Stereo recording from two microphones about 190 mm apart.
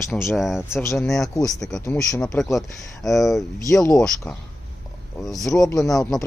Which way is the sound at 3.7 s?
15° left (ahead or behind).